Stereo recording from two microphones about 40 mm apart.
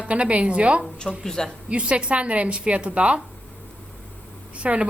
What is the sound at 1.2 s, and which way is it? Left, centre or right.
Speech, centre.